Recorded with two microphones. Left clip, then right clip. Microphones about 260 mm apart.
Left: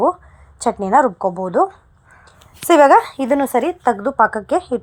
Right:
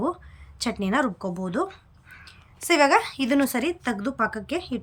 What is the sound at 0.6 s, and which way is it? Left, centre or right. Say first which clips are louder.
Speech: left 11 dB; centre.